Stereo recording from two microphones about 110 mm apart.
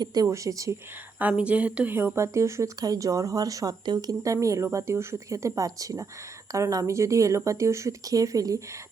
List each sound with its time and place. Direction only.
0.0 s speech: 35° right (ahead or behind)
1.2 s speech: 10° right (ahead or behind); by 8.6 s 30° right (ahead or behind)